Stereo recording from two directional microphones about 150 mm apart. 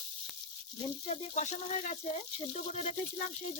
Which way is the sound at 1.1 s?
50° left (ahead or behind).